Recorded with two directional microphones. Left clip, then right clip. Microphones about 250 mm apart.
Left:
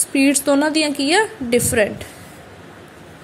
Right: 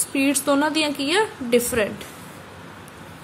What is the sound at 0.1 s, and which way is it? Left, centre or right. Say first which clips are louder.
A woman's voice: left 4 dB; centre.